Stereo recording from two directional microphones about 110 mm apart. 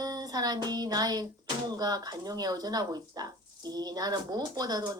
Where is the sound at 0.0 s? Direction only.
35° right (ahead or behind).